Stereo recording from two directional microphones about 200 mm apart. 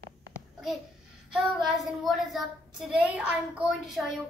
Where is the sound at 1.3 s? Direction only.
Centre (ahead or behind).